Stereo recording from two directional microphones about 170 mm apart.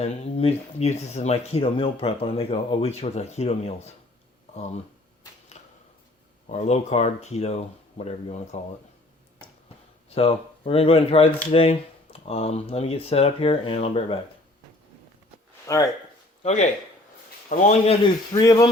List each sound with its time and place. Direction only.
0.0 s speech: 35° left (ahead or behind)
5.5 s arrow: 40° left (ahead or behind)
6.5 s speech: 40° left (ahead or behind)
10.2 s speech: 35° left (ahead or behind)
15.6 s speech: 20° left (ahead or behind)
16.4 s a man's voice: 45° left (ahead or behind)
18.3 s speech: 25° left (ahead or behind)